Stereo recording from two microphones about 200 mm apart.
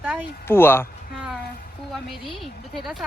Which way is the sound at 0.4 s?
10° left (ahead or behind).